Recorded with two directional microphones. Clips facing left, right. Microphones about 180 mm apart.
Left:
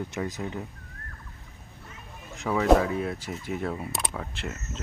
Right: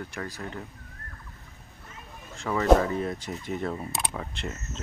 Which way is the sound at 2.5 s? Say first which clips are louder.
Even; 5° left (ahead or behind).